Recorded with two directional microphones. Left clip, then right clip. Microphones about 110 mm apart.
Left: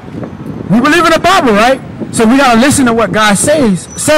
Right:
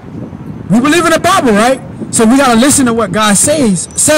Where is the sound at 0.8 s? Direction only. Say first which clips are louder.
Left 2 dB; 15° right (ahead or behind).